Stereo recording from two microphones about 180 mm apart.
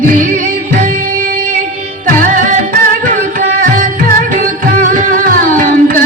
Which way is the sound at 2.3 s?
45° right (ahead or behind).